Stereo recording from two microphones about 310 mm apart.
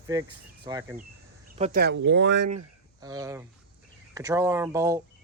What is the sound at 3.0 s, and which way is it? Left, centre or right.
Speech, centre.